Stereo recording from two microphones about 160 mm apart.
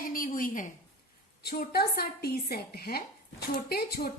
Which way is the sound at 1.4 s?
80° left.